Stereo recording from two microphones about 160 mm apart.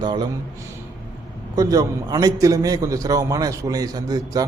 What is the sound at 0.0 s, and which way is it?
Speech, 25° right (ahead or behind).